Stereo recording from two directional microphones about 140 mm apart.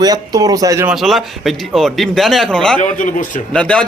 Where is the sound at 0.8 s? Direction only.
Centre (ahead or behind).